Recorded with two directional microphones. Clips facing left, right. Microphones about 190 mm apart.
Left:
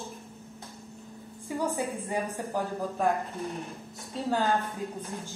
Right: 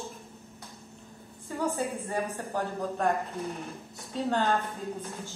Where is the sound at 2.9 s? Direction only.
Centre (ahead or behind).